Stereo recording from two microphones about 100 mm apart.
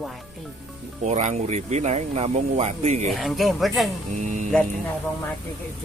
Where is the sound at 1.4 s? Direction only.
90° right.